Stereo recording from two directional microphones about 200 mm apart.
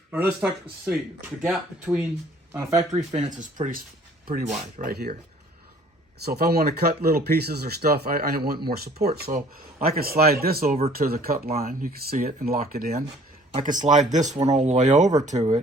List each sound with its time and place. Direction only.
0.1 s speech: 10° right (ahead or behind)
2.5 s speech: 15° right (ahead or behind)
2.7 s speech: 35° right (ahead or behind)
6.2 s speech: 50° right (ahead or behind); by 15.6 s 35° right (ahead or behind)